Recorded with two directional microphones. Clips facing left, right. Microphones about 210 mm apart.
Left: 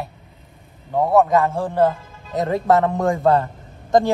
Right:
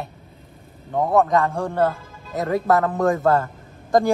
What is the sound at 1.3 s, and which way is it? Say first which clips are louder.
A woman's voice: left 2 dB; 15° left (ahead or behind).